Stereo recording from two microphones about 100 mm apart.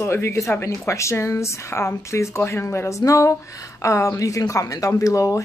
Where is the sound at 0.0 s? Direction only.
25° left (ahead or behind).